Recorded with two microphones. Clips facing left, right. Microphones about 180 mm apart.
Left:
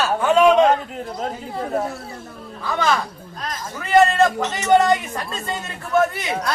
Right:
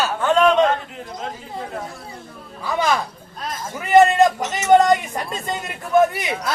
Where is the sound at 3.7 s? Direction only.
15° right (ahead or behind).